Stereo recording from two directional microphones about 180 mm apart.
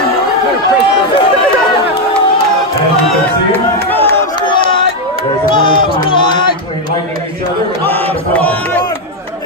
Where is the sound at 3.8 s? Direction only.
10° left (ahead or behind).